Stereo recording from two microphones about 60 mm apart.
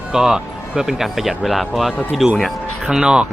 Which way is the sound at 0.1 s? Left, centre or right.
Centre.